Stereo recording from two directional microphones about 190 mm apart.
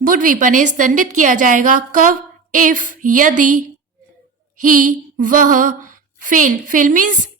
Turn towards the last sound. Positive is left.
turn(degrees=-45)  # may be behind; listen again after turning